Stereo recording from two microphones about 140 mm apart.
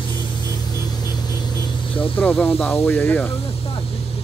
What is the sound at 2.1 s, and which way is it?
Speech, 10° left (ahead or behind).